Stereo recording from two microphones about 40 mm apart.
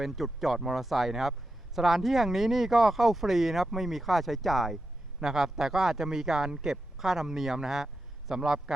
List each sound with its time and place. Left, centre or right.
0.0 s speech: centre
5.2 s a man's voice: centre